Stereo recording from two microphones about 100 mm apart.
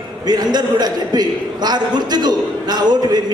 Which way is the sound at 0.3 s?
45° right (ahead or behind).